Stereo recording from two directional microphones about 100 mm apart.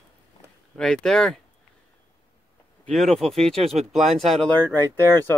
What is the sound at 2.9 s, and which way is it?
Speech, 5° left (ahead or behind).